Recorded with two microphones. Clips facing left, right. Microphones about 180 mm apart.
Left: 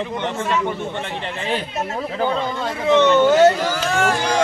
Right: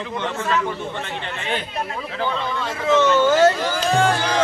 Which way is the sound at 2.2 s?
45° left (ahead or behind).